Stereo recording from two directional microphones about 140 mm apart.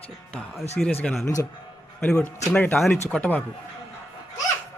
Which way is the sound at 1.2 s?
20° left (ahead or behind).